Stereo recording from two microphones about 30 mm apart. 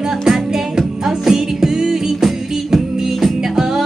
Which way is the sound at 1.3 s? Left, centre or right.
Centre.